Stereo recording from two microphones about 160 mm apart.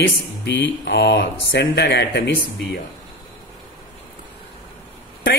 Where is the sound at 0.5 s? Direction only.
90° left.